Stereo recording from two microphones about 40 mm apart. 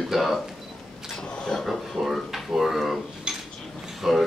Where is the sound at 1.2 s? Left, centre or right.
Left.